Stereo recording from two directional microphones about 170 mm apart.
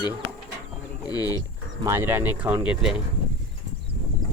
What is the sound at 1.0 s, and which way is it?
Speech, 20° left (ahead or behind).